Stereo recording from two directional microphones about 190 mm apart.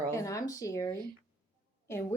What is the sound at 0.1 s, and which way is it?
Speech, 15° left (ahead or behind).